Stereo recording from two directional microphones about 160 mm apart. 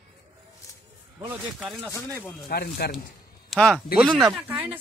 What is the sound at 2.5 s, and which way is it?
Speech, 75° left (ahead or behind).